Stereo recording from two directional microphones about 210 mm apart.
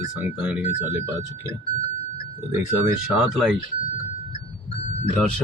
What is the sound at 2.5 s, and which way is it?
Speech, 5° right (ahead or behind).